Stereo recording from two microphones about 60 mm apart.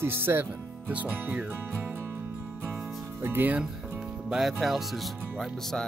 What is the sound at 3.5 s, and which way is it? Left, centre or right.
Speech, centre.